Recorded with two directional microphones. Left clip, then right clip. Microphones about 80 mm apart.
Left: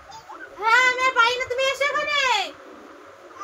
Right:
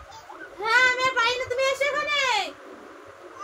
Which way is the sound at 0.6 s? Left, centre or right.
Left.